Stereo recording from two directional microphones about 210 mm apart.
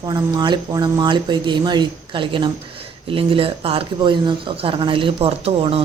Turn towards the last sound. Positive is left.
turn(degrees=-25)  # may be behind; listen again after turning